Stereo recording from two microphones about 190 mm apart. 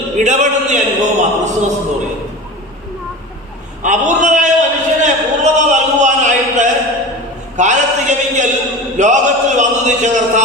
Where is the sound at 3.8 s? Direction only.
40° right (ahead or behind).